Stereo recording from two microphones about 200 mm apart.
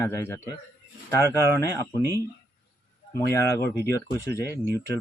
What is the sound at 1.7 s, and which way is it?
Speech, 15° left (ahead or behind).